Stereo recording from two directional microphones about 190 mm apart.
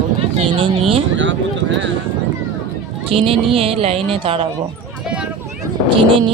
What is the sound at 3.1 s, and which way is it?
Speech, 30° right (ahead or behind).